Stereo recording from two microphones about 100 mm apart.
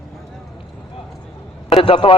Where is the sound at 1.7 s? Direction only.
75° left (ahead or behind).